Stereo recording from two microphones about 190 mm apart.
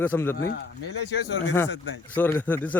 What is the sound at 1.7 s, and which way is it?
Speech, 75° left (ahead or behind).